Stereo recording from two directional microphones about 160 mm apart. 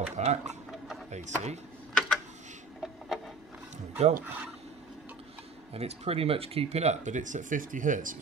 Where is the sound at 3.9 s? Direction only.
45° right (ahead or behind).